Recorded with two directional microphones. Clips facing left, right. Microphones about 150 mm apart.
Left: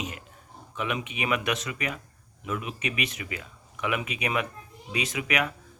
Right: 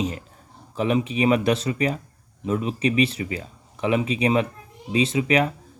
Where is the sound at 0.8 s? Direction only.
30° right (ahead or behind).